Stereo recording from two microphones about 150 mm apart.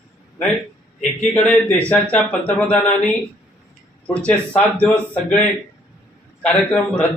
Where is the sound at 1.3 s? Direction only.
5° left (ahead or behind).